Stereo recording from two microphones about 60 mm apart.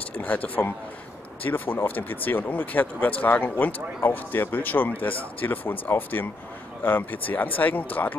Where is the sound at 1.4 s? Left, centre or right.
Left.